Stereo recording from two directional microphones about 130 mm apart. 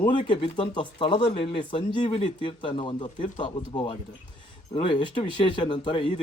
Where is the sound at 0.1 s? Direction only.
40° left (ahead or behind).